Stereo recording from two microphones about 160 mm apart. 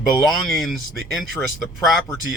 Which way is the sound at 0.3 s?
Centre (ahead or behind).